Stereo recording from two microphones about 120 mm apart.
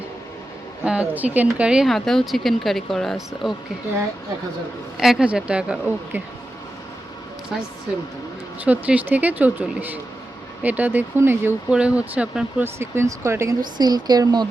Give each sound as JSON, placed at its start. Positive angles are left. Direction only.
{"t": 0.9, "sound": "speech", "side_deg": -10}
{"t": 4.9, "sound": "speech", "side_deg": -5}
{"t": 8.6, "sound": "speech", "side_deg": -15}